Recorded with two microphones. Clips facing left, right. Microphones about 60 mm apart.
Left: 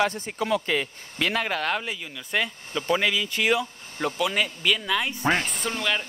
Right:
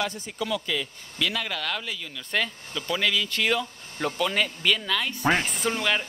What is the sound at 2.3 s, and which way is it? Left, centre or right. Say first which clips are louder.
Speech: left 1 dB; centre.